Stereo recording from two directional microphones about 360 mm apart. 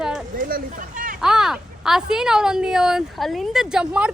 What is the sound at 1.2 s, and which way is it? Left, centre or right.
Speech, centre.